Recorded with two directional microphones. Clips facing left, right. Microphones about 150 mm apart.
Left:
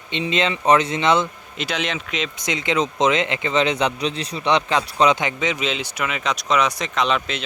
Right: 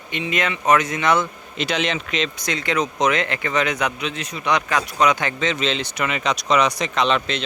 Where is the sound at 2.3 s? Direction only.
20° left (ahead or behind).